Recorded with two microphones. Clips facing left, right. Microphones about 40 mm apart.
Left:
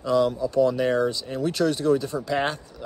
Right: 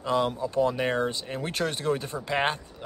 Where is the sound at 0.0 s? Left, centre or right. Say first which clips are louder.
Left 4 dB; right.